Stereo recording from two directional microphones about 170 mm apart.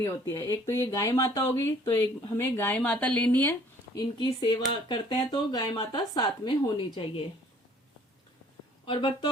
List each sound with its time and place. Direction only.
0.0 s speech: 15° left (ahead or behind)
3.9 s speech: 25° left (ahead or behind)
8.9 s speech: 30° left (ahead or behind)